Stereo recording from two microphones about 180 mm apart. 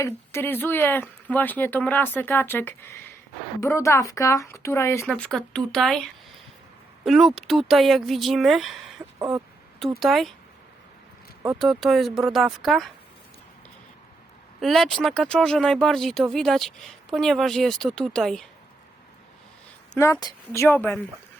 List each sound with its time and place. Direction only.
0.0 s speech: 15° left (ahead or behind)
5.0 s speech: 5° left (ahead or behind)
7.0 s speech: centre (ahead or behind)
9.1 s speech: 15° right (ahead or behind)
10.0 s speech: centre (ahead or behind)
11.6 s speech: centre (ahead or behind)
14.6 s speech: centre (ahead or behind)
19.9 s speech: 15° left (ahead or behind)